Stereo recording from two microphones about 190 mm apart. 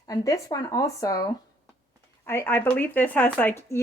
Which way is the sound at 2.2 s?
10° left (ahead or behind).